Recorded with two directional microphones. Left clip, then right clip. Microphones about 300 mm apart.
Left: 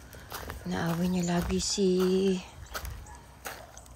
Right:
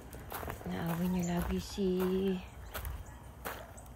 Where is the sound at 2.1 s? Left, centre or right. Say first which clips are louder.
Left 7 dB; centre.